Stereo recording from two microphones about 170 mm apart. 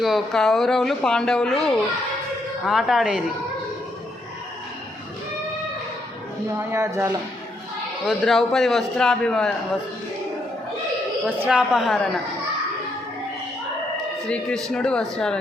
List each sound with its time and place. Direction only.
0.0 s speech: centre (ahead or behind)
6.6 s speech: 15° right (ahead or behind)
8.0 s speech: centre (ahead or behind)
11.3 s speech: 5° right (ahead or behind)
14.3 s speech: 5° left (ahead or behind)